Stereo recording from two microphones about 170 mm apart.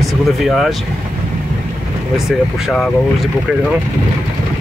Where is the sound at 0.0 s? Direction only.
Centre (ahead or behind).